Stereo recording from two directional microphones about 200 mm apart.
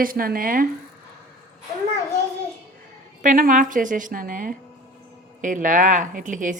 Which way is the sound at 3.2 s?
40° right (ahead or behind).